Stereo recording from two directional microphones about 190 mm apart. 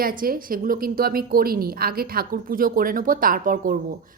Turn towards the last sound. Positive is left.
turn(degrees=-45)  # may be behind; listen again after turning